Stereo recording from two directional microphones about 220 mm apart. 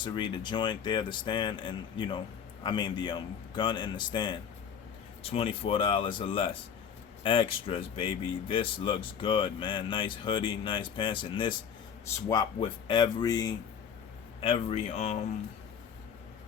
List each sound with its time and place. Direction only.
0.0 s speech: 20° left (ahead or behind)